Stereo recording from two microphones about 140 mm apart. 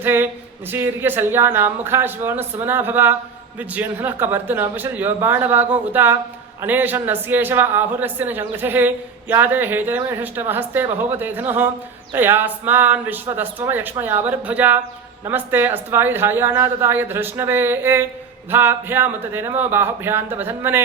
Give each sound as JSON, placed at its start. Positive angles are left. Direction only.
{"t": 0.0, "sound": "a woman's voice", "side_deg": -15}